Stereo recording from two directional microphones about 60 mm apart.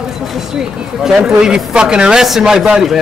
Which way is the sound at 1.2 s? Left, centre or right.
Centre.